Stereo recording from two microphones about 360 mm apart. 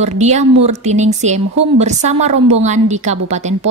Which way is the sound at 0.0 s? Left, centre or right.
Centre.